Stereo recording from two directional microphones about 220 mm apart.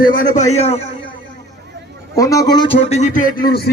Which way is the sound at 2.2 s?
15° left (ahead or behind).